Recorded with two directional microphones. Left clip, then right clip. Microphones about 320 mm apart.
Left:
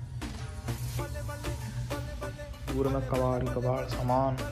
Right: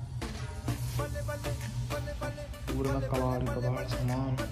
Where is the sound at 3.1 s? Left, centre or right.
Centre.